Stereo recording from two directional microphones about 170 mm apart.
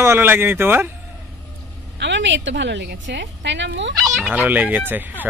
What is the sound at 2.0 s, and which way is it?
A woman's voice, 90° right.